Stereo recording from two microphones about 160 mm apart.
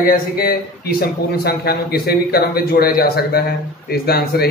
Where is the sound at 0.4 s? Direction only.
70° left (ahead or behind).